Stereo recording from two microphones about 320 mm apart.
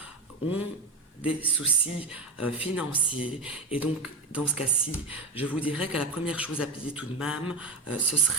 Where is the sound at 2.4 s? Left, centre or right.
Centre.